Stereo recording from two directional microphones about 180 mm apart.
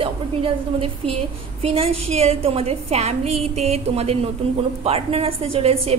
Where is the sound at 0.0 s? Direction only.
30° right (ahead or behind).